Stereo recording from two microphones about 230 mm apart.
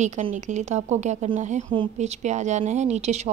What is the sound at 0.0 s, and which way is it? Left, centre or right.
A woman's voice, right.